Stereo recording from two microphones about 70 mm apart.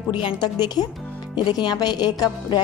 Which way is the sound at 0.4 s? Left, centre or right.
Left.